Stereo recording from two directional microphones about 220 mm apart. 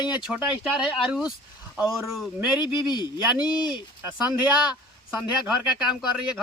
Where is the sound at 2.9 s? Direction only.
20° left (ahead or behind).